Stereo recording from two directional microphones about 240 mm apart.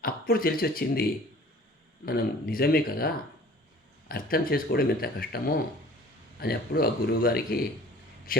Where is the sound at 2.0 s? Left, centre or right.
Left.